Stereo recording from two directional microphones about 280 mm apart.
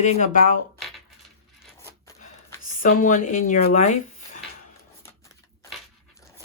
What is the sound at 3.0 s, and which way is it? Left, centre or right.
Speech, left.